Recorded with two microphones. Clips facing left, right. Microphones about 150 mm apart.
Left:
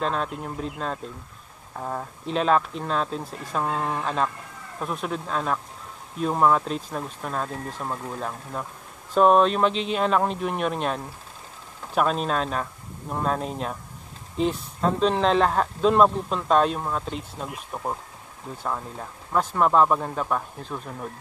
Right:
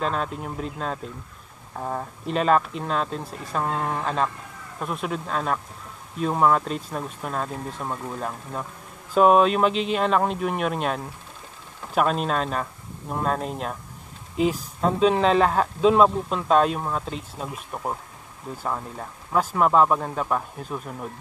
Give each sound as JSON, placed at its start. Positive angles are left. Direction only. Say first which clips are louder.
{"t": 0.0, "sound": "speech", "louder": "even", "side_deg": 0}